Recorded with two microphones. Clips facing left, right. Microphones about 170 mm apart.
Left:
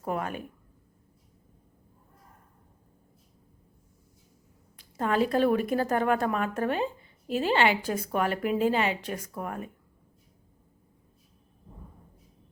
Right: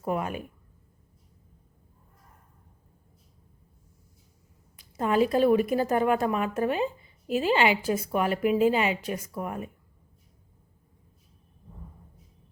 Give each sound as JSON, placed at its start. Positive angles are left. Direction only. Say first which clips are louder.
{"t": 0.0, "sound": "speech", "louder": "right 2 dB", "side_deg": -10}
{"t": 4.8, "sound": "a sound", "louder": "right 2 dB", "side_deg": -10}
{"t": 5.3, "sound": "speech", "louder": "right 2 dB", "side_deg": -10}